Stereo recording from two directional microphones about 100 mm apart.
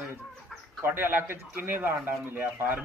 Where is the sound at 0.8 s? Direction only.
20° right (ahead or behind).